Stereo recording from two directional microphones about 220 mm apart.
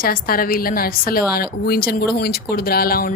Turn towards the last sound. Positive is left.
turn(degrees=40)  # may be behind; listen again after turning